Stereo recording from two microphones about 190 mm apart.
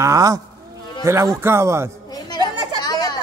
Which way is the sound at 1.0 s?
15° right (ahead or behind).